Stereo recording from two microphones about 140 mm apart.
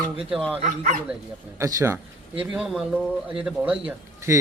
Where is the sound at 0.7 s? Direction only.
70° right (ahead or behind).